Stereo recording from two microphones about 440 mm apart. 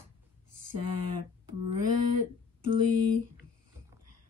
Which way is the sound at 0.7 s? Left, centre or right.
Right.